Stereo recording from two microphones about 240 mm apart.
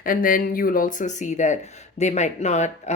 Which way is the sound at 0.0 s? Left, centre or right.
Left.